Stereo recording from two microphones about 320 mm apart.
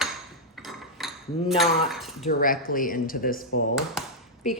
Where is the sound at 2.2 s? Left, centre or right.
Left.